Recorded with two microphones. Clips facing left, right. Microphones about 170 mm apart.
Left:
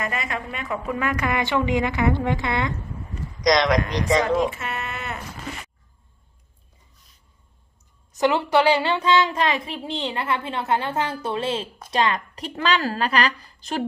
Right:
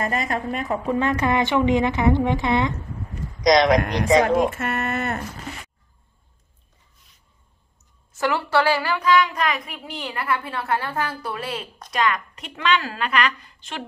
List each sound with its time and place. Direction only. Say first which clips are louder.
0.0 s a woman's voice: right 4 dB; 40° right (ahead or behind); by 3.8 s 20° right (ahead or behind)
3.8 s speech: right 3 dB; 55° right (ahead or behind)
8.1 s a woman's voice: left 2 dB; 20° left (ahead or behind); by 13.8 s 40° left (ahead or behind)